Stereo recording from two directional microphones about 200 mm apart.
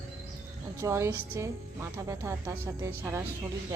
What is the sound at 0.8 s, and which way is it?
A woman's voice, 15° right (ahead or behind).